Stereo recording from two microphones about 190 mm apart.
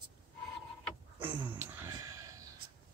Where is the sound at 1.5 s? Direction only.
10° right (ahead or behind).